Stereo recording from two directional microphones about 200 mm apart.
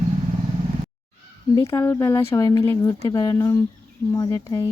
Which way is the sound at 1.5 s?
15° left (ahead or behind).